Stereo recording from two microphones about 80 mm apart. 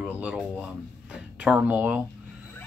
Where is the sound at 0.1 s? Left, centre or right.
Centre.